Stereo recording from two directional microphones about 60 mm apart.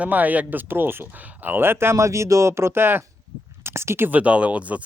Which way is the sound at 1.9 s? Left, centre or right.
Right.